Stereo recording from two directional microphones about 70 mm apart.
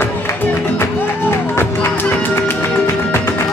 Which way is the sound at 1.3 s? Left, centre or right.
Left.